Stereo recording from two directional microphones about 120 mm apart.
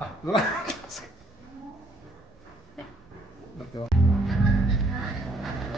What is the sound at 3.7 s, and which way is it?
Speech, 40° left (ahead or behind).